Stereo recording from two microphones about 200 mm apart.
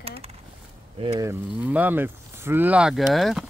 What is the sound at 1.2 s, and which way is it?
Speech, 10° right (ahead or behind).